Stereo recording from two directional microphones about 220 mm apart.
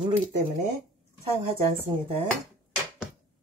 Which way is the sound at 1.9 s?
15° right (ahead or behind).